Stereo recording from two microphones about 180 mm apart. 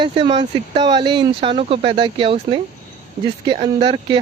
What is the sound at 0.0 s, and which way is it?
Speech, 30° right (ahead or behind).